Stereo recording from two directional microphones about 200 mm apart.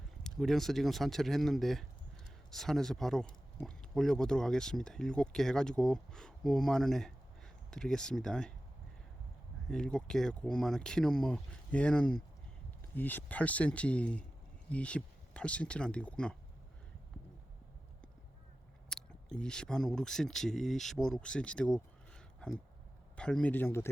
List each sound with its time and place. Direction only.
0.2 s speech: centre (ahead or behind)
9.6 s speech: 5° left (ahead or behind)
18.9 s speech: 5° left (ahead or behind)